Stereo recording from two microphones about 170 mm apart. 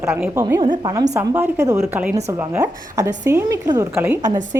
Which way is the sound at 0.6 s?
25° right (ahead or behind).